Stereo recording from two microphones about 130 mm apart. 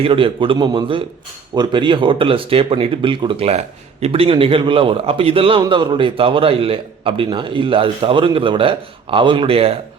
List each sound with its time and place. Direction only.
0.0 s a man's voice: 40° right (ahead or behind)